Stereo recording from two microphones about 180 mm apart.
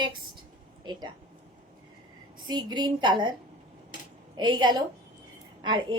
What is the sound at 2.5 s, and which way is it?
Speech, 25° right (ahead or behind).